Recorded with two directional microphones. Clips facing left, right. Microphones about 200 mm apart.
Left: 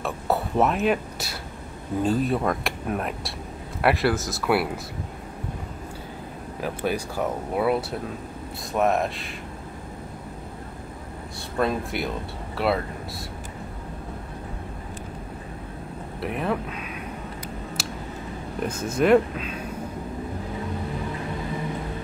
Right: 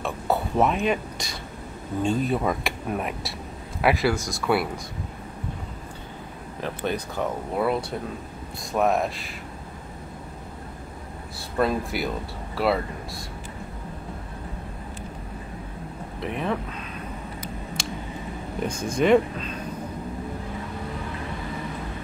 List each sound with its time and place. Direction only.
0.0 s a sound: centre (ahead or behind)
2.0 s speech: centre (ahead or behind)
6.6 s speech: 10° left (ahead or behind)
8.7 s speech: centre (ahead or behind)
11.5 s speech: centre (ahead or behind)
16.2 s a sound: 5° left (ahead or behind)
18.6 s speech: 5° left (ahead or behind)